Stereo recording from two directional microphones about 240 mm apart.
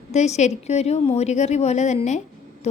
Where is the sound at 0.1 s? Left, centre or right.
Left.